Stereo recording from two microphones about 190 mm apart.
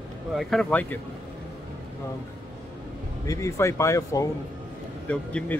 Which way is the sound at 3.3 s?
15° left (ahead or behind).